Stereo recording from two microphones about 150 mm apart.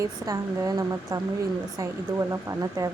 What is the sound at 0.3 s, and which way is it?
A woman's voice, 25° right (ahead or behind).